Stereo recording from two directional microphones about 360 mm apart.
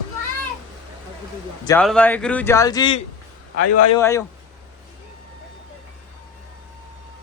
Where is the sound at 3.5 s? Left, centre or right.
Left.